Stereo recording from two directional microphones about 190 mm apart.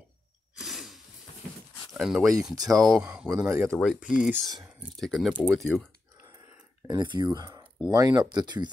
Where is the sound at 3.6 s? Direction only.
Centre (ahead or behind).